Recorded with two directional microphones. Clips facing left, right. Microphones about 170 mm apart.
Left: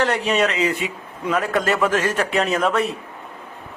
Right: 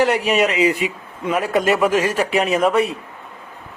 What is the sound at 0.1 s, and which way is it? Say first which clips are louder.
A man's voice: right 2 dB; 10° right (ahead or behind).